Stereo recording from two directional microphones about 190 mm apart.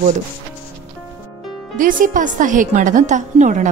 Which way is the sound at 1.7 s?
45° right (ahead or behind).